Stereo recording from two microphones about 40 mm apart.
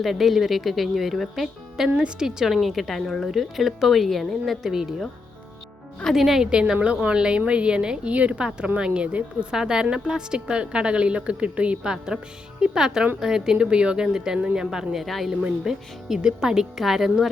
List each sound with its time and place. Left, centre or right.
0.0 s speech: centre
2.6 s speech: centre
6.1 s speech: centre
6.4 s a woman's voice: centre
8.1 s speech: right
8.8 s a woman's voice: right
11.8 s a woman's voice: centre
15.0 s speech: centre